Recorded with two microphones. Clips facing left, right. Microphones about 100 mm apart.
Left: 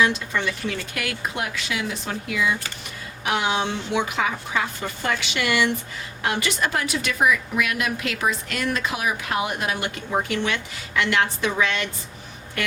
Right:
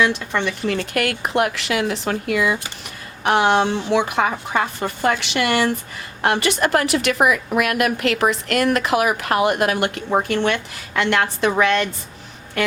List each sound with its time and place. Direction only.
0.7 s a woman's voice: 60° right (ahead or behind)
6.2 s a woman's voice: 60° right (ahead or behind)